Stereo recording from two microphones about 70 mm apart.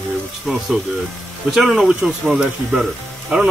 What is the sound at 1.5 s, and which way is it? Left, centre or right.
Speech, centre.